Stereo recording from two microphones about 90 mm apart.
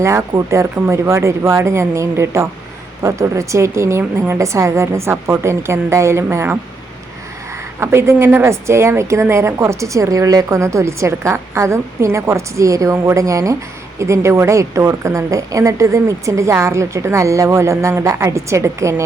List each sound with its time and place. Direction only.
0.0 s a woman's voice: 35° right (ahead or behind)
7.8 s a woman's voice: 30° right (ahead or behind)